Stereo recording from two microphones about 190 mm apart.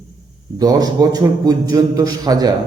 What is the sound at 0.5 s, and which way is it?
A man's voice, 20° right (ahead or behind).